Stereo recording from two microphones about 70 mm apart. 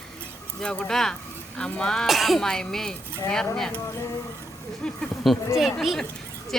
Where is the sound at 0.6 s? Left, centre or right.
Centre.